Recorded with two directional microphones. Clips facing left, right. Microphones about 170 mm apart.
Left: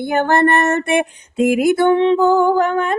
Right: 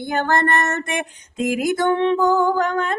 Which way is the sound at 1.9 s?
15° left (ahead or behind).